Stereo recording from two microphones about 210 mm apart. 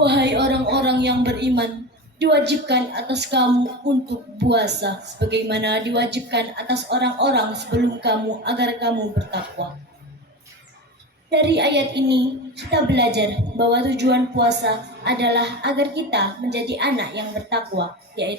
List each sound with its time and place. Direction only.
0.0 s a woman's voice: 55° right (ahead or behind)
11.3 s a woman's voice: 55° right (ahead or behind)